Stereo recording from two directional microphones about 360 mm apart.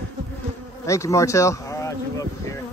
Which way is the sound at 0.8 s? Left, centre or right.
Centre.